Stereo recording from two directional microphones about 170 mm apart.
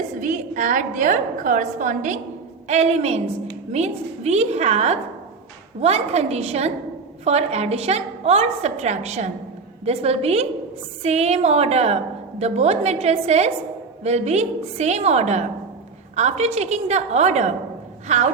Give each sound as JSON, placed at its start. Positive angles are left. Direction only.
{"t": 0.2, "sound": "a woman's voice", "side_deg": -45}